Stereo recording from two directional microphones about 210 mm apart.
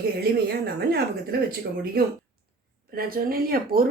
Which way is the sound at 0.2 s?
45° right (ahead or behind).